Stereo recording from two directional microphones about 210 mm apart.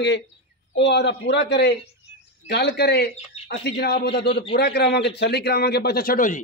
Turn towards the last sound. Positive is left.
turn(degrees=40)  # may be behind; listen again after turning